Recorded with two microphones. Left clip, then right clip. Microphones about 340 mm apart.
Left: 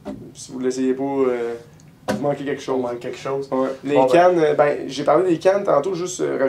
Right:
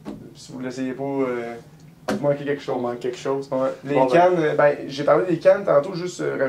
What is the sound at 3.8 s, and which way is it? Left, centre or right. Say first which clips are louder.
Speech: left 3 dB; right.